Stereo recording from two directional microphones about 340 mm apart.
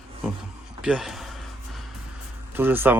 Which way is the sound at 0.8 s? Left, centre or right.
Centre.